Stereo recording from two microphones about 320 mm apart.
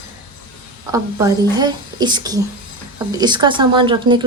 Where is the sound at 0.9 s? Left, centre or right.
Centre.